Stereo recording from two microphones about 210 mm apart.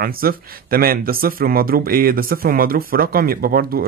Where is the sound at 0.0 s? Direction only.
45° right (ahead or behind).